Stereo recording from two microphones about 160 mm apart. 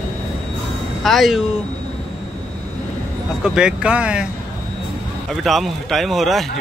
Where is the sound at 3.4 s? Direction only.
5° right (ahead or behind).